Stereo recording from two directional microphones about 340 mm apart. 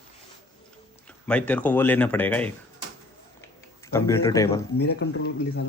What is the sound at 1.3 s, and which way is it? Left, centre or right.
Speech, centre.